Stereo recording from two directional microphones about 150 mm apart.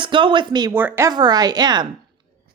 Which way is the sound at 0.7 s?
15° right (ahead or behind).